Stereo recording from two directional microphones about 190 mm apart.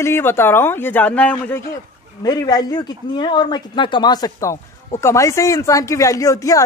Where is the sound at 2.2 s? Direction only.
20° left (ahead or behind).